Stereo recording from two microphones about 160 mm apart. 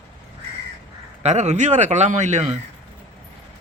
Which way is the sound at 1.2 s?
45° right (ahead or behind).